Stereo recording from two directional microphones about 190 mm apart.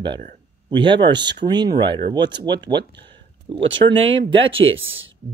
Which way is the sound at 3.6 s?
80° right.